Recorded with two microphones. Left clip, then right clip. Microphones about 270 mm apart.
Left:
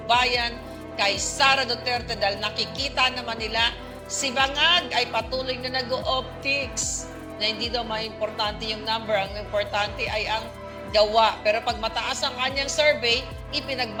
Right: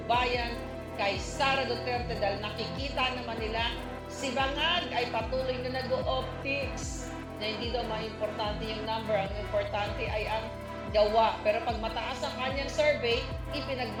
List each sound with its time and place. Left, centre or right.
0.1 s music: left
0.9 s a woman's voice: left